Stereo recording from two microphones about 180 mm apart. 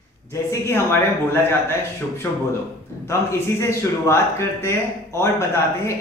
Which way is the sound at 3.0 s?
15° left (ahead or behind).